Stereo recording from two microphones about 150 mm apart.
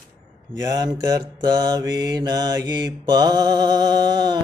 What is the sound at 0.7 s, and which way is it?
Mantra, 25° right (ahead or behind).